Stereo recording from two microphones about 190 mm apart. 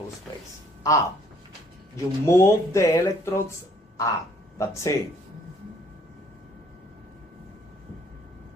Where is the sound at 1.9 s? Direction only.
15° left (ahead or behind).